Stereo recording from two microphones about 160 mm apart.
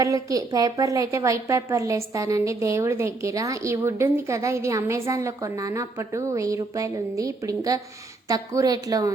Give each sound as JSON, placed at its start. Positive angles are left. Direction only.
{"t": 0.0, "sound": "a woman's voice", "side_deg": -20}